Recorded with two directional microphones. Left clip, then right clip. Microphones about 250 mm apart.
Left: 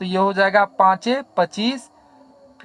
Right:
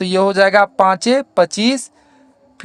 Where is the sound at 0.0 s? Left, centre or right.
Right.